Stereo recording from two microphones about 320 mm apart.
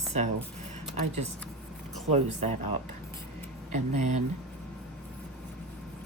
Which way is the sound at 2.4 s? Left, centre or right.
Right.